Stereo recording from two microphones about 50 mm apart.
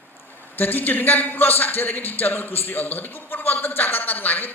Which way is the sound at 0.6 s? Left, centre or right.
Left.